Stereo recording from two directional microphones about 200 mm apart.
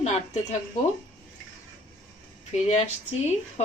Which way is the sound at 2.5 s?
35° left (ahead or behind).